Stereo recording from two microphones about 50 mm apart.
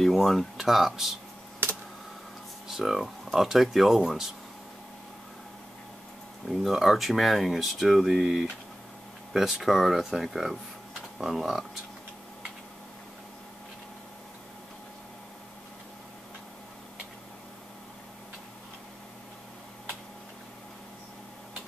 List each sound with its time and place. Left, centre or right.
0.0 s speech: centre
1.6 s a sound: right
2.7 s speech: centre
6.5 s speech: centre